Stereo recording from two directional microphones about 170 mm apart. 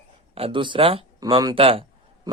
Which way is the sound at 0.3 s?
30° right (ahead or behind).